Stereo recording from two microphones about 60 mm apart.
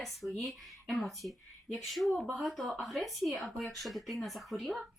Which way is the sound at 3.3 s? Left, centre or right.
Centre.